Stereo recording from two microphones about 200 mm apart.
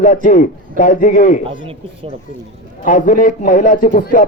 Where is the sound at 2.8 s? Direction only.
40° left (ahead or behind).